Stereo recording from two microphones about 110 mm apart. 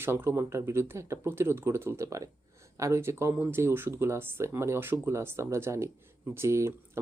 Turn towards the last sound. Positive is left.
turn(degrees=-25)  # may be behind; listen again after turning